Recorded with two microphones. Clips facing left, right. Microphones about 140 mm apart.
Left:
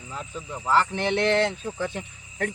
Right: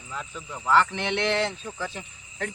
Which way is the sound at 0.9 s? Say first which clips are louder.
Left 4 dB; 45° left (ahead or behind).